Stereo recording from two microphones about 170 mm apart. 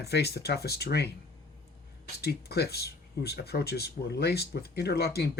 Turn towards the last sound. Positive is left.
turn(degrees=70)  # may be behind; listen again after turning